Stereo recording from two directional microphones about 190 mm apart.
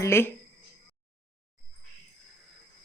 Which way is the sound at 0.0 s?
10° left (ahead or behind).